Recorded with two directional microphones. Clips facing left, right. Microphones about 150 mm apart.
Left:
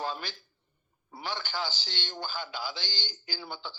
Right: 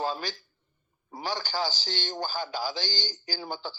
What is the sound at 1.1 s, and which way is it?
Speech, 40° right (ahead or behind).